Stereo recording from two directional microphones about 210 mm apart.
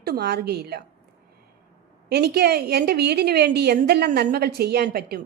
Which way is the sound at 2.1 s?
50° right (ahead or behind).